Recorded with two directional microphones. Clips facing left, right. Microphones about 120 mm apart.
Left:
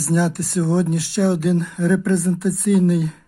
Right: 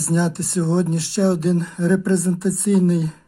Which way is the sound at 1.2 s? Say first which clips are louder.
Right 1 dB; 15° right (ahead or behind).